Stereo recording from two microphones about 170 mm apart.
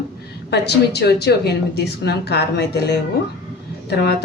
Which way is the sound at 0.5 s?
75° left (ahead or behind).